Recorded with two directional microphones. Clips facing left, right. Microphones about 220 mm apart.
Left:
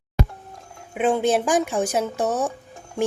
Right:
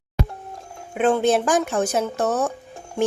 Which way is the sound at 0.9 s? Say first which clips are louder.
Right 2 dB; 10° left (ahead or behind).